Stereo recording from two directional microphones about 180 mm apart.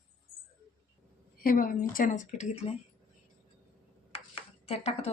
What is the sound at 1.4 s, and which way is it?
Speech, 50° left (ahead or behind).